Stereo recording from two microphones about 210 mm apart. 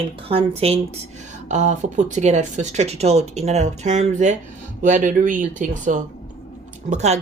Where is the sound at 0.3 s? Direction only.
30° right (ahead or behind).